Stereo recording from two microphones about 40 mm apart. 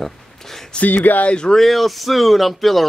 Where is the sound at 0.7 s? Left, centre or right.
Left.